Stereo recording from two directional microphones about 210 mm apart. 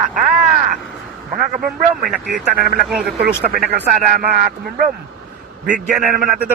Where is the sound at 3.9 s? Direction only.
35° right (ahead or behind).